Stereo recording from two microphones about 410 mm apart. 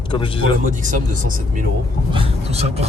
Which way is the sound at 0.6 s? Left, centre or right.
Centre.